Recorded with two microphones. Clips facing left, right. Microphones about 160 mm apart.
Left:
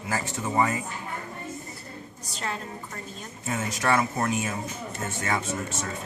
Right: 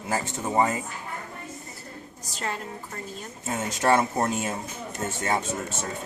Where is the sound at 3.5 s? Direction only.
25° right (ahead or behind).